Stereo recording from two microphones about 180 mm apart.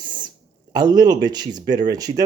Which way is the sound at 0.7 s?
20° right (ahead or behind).